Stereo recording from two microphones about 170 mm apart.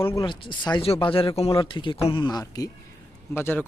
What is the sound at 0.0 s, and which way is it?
Speech, 15° left (ahead or behind).